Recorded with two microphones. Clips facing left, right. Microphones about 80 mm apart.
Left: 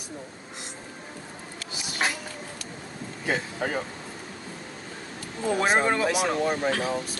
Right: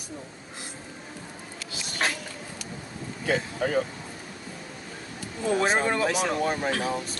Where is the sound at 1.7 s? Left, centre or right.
Centre.